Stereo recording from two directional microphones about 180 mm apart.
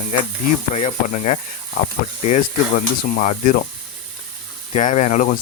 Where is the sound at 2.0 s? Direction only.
40° left (ahead or behind).